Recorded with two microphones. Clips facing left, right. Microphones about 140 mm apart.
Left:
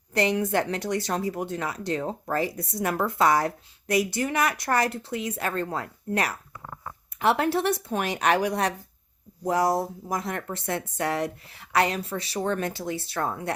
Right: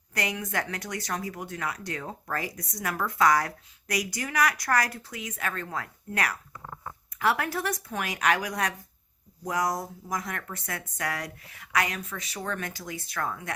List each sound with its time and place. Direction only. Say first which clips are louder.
0.1 s speech: left 8 dB; 30° left (ahead or behind)